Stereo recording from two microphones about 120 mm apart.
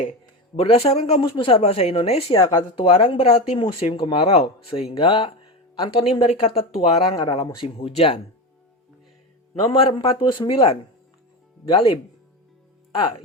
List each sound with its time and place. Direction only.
0.6 s speech: 55° left (ahead or behind)
1.2 s speech: 45° left (ahead or behind)
1.5 s speech: 60° left (ahead or behind)
2.4 s speech: 30° left (ahead or behind)
2.7 s speech: 50° left (ahead or behind)
7.5 s speech: 50° left (ahead or behind)
9.6 s speech: 50° left (ahead or behind)